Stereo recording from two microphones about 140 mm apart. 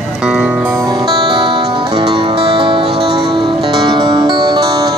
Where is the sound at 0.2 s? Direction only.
5° right (ahead or behind).